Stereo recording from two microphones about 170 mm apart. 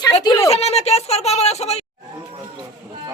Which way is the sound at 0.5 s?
40° left (ahead or behind).